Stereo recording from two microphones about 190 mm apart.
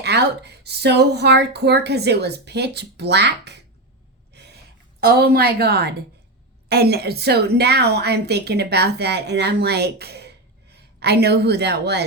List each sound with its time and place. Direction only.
0.0 s a woman's voice: 60° right (ahead or behind)
4.9 s a woman's voice: 55° right (ahead or behind)